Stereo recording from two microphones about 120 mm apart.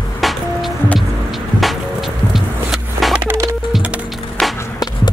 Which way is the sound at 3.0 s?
Centre (ahead or behind).